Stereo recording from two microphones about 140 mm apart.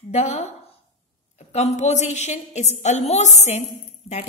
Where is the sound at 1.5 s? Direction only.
55° left (ahead or behind).